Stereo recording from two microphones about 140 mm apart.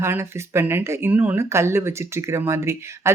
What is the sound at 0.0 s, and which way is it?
Speech, 20° right (ahead or behind).